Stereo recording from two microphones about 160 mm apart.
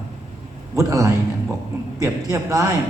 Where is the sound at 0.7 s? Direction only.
20° right (ahead or behind).